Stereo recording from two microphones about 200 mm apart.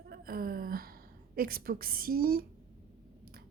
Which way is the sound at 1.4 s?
50° right (ahead or behind).